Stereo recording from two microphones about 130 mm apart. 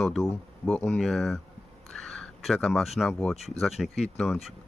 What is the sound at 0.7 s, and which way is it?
Speech, 15° left (ahead or behind).